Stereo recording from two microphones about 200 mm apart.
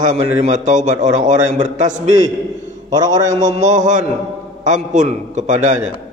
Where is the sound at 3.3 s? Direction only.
35° right (ahead or behind).